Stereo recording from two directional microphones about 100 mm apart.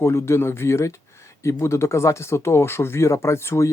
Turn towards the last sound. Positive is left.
turn(degrees=30)  # may be behind; listen again after turning